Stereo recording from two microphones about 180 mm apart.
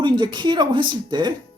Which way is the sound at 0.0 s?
25° right (ahead or behind).